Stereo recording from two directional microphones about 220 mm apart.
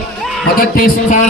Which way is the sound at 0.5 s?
40° left (ahead or behind).